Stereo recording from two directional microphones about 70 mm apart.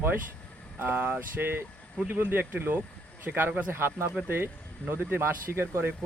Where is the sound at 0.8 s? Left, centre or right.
Right.